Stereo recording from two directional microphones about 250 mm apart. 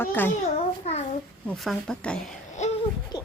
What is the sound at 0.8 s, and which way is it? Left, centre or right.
Child singing, left.